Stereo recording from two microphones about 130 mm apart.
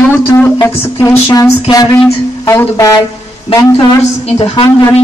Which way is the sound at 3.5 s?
50° left (ahead or behind).